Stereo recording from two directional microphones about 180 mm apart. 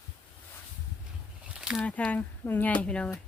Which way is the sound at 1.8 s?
5° left (ahead or behind).